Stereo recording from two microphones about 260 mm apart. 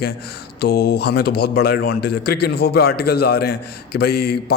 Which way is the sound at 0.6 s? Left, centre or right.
Left.